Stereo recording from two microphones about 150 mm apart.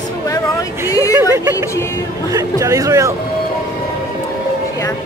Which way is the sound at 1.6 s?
20° left (ahead or behind).